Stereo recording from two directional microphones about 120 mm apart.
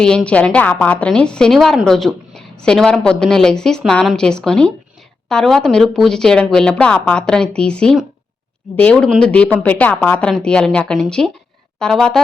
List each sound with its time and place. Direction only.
0.0 s a woman's voice: 10° left (ahead or behind)